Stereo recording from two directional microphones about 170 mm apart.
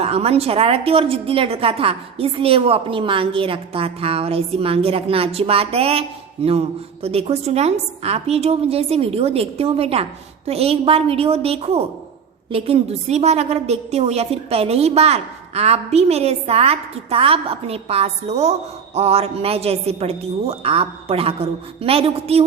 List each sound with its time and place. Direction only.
0.0 s a woman's voice: 35° right (ahead or behind)